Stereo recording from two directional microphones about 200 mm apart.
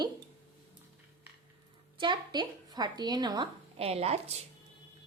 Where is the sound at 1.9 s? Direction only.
25° right (ahead or behind).